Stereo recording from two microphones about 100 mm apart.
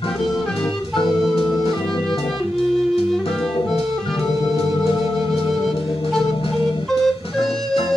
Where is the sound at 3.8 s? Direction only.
Centre (ahead or behind).